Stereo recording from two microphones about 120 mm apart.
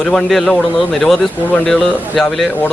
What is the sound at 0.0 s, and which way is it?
A man's voice, 5° left (ahead or behind).